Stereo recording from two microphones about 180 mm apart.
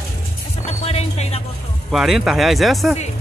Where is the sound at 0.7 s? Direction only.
35° left (ahead or behind).